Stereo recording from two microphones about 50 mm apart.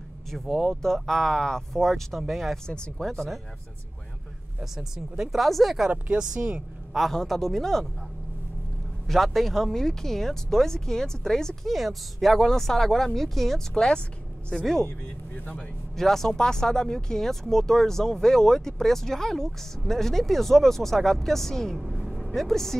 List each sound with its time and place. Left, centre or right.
0.3 s speech: centre
4.6 s speech: centre
5.4 s speech: centre
5.9 s speech: right
7.1 s speech: centre
9.0 s speech: centre
16.0 s speech: centre
21.7 s speech: centre